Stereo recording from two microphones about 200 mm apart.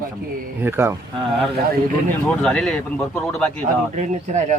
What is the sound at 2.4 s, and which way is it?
Speech, 5° left (ahead or behind).